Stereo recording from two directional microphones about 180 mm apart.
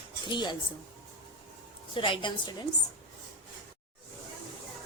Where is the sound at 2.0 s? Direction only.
25° left (ahead or behind).